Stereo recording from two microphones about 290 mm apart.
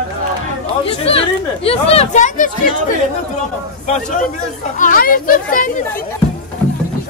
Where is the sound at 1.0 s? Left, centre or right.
Centre.